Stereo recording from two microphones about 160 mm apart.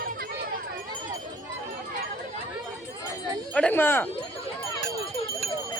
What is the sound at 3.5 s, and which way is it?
Speech, 10° left (ahead or behind).